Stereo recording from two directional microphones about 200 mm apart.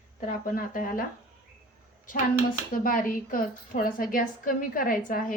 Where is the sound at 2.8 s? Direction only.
45° left (ahead or behind).